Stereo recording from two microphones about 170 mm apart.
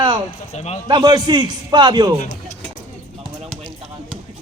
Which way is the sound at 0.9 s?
25° right (ahead or behind).